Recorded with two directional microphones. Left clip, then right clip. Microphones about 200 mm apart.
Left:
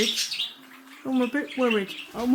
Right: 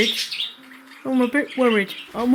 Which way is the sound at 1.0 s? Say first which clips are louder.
Right 6 dB; 15° right (ahead or behind).